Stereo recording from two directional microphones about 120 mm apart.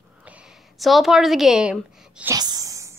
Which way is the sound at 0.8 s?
Centre (ahead or behind).